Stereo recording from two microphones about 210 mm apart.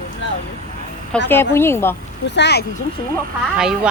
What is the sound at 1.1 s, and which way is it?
Speech, 10° left (ahead or behind).